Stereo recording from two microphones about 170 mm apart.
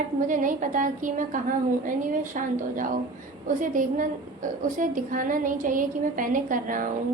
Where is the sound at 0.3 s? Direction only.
50° right (ahead or behind).